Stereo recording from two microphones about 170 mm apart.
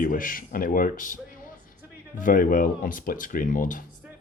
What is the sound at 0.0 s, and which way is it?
Speech, 55° left (ahead or behind).